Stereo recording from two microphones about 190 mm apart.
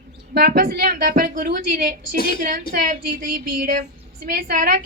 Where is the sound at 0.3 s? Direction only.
55° right (ahead or behind).